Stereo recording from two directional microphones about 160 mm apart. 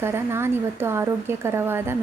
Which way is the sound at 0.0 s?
15° right (ahead or behind).